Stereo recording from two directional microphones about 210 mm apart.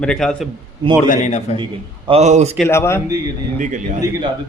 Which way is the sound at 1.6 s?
25° right (ahead or behind).